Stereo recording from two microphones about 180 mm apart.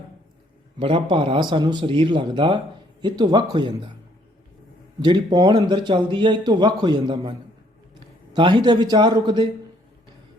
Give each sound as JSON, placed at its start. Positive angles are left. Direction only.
{"t": 0.8, "sound": "a man's voice", "side_deg": -30}
{"t": 4.9, "sound": "a man's voice", "side_deg": -25}